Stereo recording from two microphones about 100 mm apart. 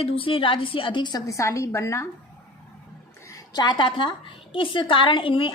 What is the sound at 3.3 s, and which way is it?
A woman's voice, 45° left (ahead or behind).